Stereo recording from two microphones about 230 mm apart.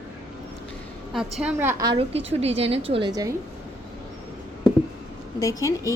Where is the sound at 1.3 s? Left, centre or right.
Centre.